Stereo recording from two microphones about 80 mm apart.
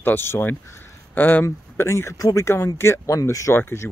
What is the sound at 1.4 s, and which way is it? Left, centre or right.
Speech, left.